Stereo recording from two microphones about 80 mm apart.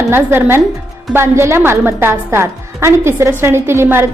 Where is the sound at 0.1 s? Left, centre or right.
Right.